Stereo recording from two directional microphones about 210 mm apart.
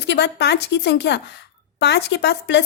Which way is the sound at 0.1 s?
55° left (ahead or behind).